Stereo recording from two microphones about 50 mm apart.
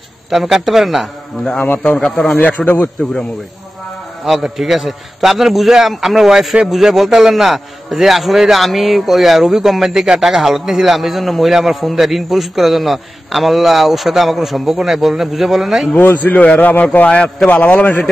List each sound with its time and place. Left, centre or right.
0.3 s a man's voice: centre
2.0 s a man's voice: centre
2.4 s a man's voice: left
4.2 s a man's voice: centre
15.9 s a man's voice: left
16.4 s a man's voice: left